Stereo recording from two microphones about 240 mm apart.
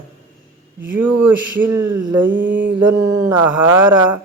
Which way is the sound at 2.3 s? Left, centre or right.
Right.